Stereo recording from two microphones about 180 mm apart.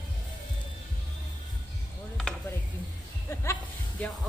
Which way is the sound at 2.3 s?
5° left (ahead or behind).